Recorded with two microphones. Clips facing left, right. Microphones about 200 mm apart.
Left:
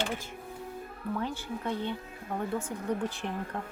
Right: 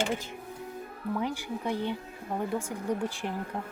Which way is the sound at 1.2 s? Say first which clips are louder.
Right 2 dB; 15° right (ahead or behind).